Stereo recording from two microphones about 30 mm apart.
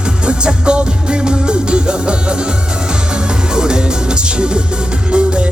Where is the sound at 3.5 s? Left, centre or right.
Right.